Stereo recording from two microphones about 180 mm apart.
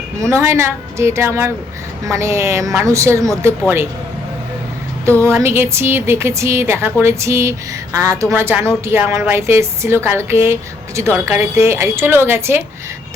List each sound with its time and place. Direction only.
0.2 s a woman's voice: 15° right (ahead or behind)
5.0 s a woman's voice: 15° right (ahead or behind)